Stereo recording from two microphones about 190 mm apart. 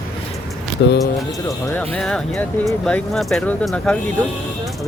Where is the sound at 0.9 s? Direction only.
15° left (ahead or behind).